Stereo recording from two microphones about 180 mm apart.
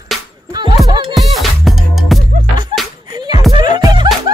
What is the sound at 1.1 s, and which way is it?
Music, centre (ahead or behind).